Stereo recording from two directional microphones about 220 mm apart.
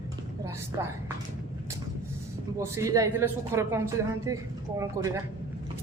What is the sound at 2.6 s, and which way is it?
Speech, 15° right (ahead or behind).